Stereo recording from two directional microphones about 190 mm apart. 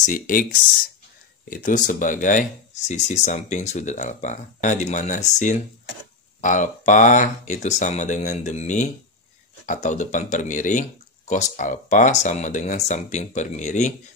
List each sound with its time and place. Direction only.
0.0 s speech: 45° left (ahead or behind)
1.5 s speech: 45° left (ahead or behind)